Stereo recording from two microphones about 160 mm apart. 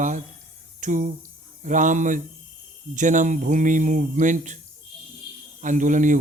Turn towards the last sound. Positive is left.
turn(degrees=-55)  # may be behind; listen again after turning